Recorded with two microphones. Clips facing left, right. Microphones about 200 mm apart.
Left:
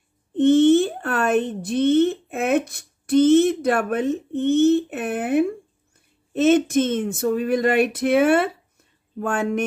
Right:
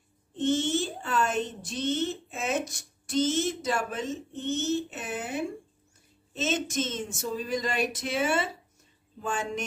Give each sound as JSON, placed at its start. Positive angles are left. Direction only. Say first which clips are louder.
{"t": 0.3, "sound": "speech", "louder": "left 12 dB", "side_deg": 60}